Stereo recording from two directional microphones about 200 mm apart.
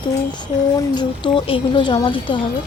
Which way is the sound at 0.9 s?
25° left (ahead or behind).